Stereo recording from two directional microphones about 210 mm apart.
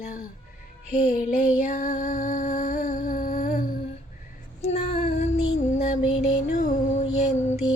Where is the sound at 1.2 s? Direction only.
40° left (ahead or behind).